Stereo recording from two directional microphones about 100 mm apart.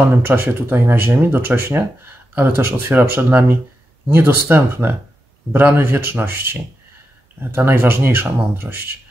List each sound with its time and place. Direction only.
0.1 s speech: 20° right (ahead or behind)